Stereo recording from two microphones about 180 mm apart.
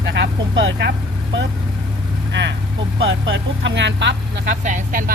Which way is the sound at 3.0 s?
85° right.